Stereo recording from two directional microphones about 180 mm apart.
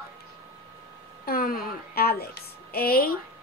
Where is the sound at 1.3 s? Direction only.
55° left (ahead or behind).